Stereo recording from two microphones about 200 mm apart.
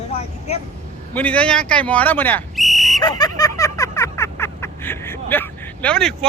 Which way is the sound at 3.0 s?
20° left (ahead or behind).